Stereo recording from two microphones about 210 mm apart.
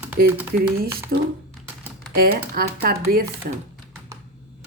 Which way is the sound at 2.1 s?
45° right (ahead or behind).